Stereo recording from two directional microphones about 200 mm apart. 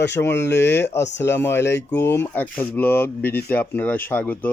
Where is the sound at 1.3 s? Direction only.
10° left (ahead or behind).